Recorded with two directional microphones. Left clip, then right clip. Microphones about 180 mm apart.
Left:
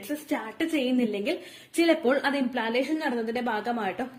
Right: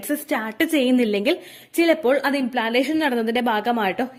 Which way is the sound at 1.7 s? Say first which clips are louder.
Right 5 dB; 40° right (ahead or behind).